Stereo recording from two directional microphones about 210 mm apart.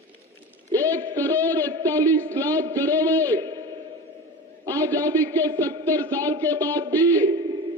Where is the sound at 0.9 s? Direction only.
15° right (ahead or behind).